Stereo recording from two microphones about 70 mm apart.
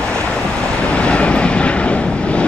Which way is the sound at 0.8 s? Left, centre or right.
Centre.